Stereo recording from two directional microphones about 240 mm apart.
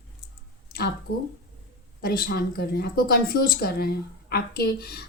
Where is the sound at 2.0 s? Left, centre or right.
Left.